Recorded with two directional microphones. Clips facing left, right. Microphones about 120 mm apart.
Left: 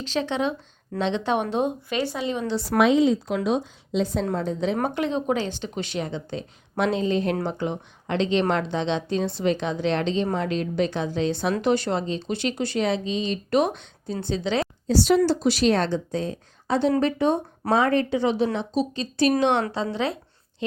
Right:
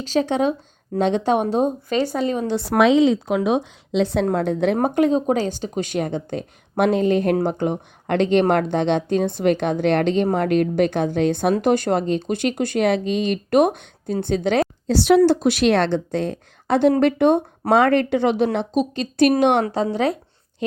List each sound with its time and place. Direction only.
0.0 s speech: 40° right (ahead or behind)
2.6 s a woman's voice: 75° right (ahead or behind)
4.8 s speech: 45° right (ahead or behind)
14.8 s a woman's voice: 65° right (ahead or behind)
15.3 s speech: 55° right (ahead or behind)
19.7 s speech: 45° right (ahead or behind)